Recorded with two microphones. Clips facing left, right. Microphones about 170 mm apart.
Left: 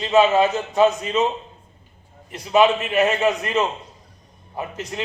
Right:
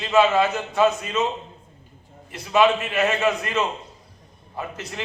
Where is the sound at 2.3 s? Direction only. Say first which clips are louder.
Left 2 dB; 20° left (ahead or behind).